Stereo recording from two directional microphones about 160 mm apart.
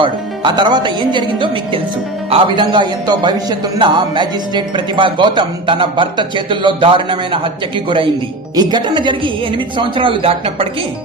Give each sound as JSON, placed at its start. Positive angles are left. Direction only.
{"t": 0.0, "sound": "a man's voice", "side_deg": -30}